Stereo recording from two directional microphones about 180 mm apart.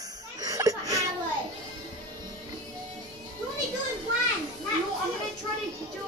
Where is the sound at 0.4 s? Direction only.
20° right (ahead or behind).